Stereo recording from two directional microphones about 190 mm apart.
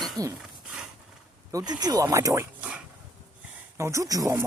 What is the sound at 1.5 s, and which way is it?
Speech, 20° right (ahead or behind).